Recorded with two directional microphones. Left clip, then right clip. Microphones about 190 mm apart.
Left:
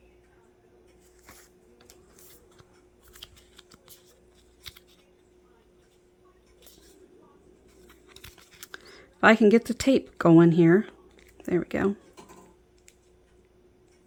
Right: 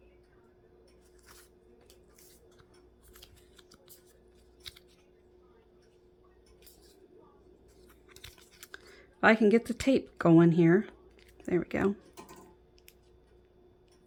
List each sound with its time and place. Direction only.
3.1 s scissors: 15° left (ahead or behind)
7.9 s a sound: 10° left (ahead or behind)
11.3 s speech: 15° left (ahead or behind)